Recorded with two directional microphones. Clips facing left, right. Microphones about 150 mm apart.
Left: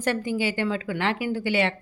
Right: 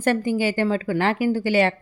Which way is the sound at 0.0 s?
45° right (ahead or behind).